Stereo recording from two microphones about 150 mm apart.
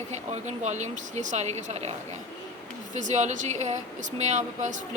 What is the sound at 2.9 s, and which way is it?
Speech, 55° right (ahead or behind).